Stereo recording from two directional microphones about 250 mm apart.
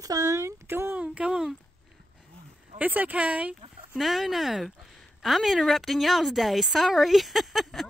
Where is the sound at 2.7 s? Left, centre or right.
Centre.